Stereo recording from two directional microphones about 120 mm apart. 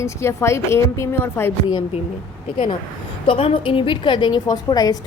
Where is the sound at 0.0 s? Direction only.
25° left (ahead or behind).